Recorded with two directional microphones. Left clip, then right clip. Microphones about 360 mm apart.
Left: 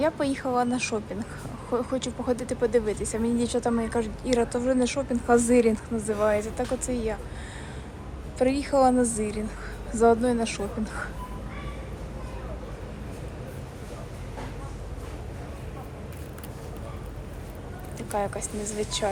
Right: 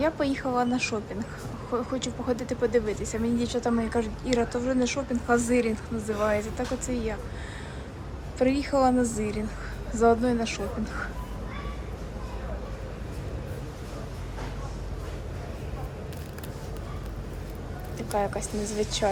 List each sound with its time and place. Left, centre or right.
0.0 s speech: centre
8.4 s speech: centre
18.1 s a woman's voice: centre